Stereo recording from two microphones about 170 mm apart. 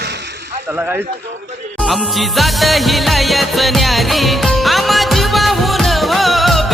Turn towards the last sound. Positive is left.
turn(degrees=0)  # may be behind; listen again after turning